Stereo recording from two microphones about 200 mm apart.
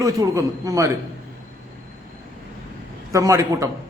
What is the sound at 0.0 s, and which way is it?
Speech, 15° right (ahead or behind).